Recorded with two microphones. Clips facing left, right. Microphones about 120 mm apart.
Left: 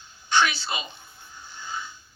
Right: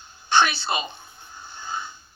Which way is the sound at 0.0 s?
55° right (ahead or behind).